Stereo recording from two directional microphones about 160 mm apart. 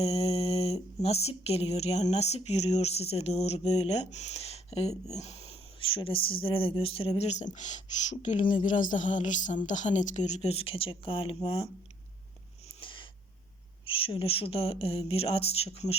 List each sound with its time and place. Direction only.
0.0 s speech: 40° left (ahead or behind)
12.8 s a sound: 30° left (ahead or behind)
13.8 s speech: 35° left (ahead or behind)